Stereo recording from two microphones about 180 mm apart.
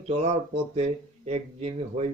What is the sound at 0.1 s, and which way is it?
Speech, 35° right (ahead or behind).